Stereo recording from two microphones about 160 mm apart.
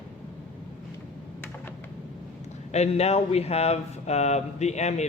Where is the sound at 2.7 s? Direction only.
40° left (ahead or behind).